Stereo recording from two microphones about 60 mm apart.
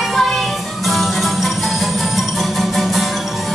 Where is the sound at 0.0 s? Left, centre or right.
Centre.